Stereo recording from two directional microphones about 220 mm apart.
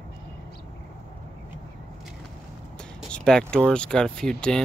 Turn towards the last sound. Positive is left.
turn(degrees=5)  # may be behind; listen again after turning